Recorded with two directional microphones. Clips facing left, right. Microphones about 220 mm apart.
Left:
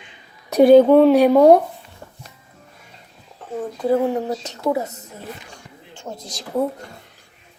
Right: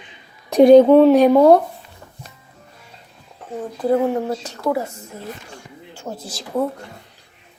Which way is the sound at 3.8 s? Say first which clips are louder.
Right 1 dB; 5° left (ahead or behind).